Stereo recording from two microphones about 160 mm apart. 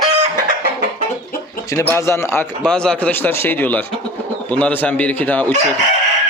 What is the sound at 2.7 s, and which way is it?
A man's voice, 5° left (ahead or behind).